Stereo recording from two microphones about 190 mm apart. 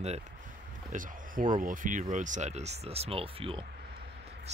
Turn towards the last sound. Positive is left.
turn(degrees=-30)  # may be behind; listen again after turning